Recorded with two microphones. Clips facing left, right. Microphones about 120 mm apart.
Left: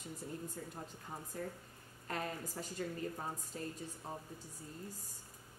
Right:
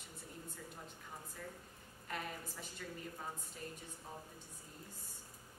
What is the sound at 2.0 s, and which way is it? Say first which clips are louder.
Speech: left 4 dB; 40° left (ahead or behind).